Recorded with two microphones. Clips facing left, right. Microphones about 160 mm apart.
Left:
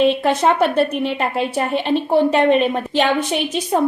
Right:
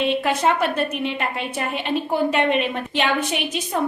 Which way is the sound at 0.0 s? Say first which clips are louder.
Left 5 dB; 35° left (ahead or behind).